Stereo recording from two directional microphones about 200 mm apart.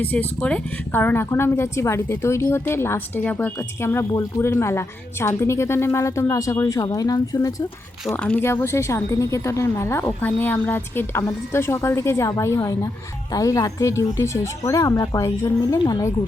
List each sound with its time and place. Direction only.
0.0 s speech: 10° left (ahead or behind)